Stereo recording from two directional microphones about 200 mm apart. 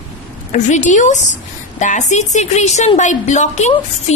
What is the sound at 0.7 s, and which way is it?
A woman's voice, 40° left (ahead or behind).